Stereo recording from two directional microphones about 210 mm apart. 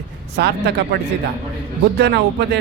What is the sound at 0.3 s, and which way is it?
Speech, 50° right (ahead or behind).